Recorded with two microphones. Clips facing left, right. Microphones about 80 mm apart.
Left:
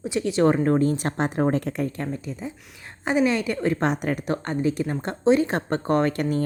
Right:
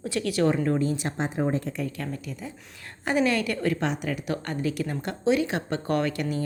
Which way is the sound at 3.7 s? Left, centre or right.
Left.